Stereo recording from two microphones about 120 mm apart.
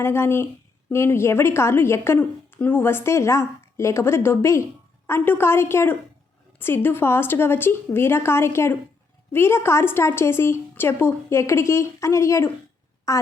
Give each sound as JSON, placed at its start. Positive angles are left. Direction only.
{"t": 0.0, "sound": "a woman's voice", "side_deg": 20}